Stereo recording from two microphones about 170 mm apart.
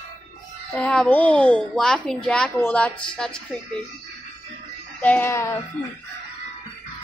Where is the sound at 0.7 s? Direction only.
5° left (ahead or behind).